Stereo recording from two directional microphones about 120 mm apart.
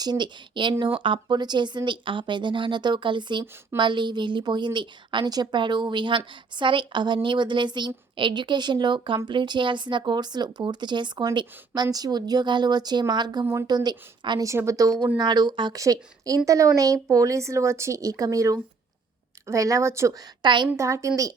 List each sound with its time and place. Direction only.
0.0 s a woman's voice: 35° right (ahead or behind)
13.4 s speech: 25° right (ahead or behind)
13.7 s a woman's voice: 35° right (ahead or behind)
14.4 s a woman's voice: 25° right (ahead or behind)
20.4 s a woman's voice: 40° right (ahead or behind)
20.7 s speech: 25° right (ahead or behind)